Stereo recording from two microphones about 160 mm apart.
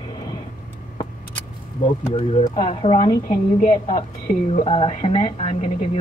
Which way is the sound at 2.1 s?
30° left (ahead or behind).